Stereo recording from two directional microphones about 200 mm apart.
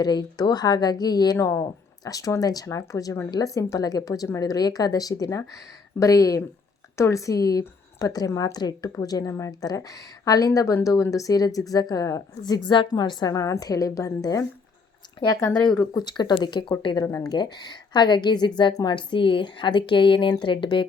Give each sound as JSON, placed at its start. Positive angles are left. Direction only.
{"t": 0.0, "sound": "a woman's voice", "side_deg": 20}